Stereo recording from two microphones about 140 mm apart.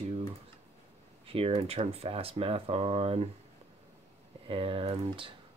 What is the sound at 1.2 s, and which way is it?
Speech, 40° right (ahead or behind).